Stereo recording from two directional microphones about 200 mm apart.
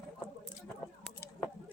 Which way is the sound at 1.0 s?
5° left (ahead or behind).